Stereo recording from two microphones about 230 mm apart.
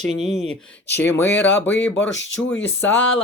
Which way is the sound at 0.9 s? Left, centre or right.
Centre.